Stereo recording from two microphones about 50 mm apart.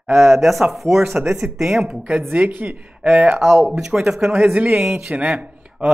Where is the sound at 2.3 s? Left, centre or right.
Right.